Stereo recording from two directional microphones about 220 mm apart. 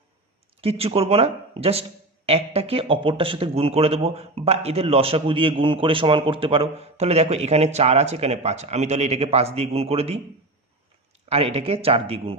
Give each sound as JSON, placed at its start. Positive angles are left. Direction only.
{"t": 0.6, "sound": "speech", "side_deg": -25}
{"t": 11.3, "sound": "speech", "side_deg": -25}